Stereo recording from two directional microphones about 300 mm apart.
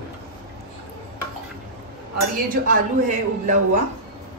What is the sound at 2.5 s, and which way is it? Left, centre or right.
Speech, right.